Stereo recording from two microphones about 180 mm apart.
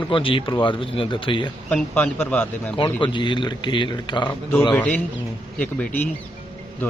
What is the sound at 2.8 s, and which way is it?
Speech, 25° left (ahead or behind).